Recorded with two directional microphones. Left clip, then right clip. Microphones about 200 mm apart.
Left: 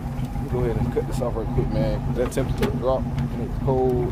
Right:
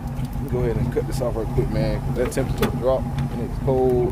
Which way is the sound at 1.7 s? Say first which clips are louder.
Even; 15° right (ahead or behind).